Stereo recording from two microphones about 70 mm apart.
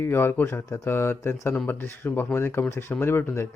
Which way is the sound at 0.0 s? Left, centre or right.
Left.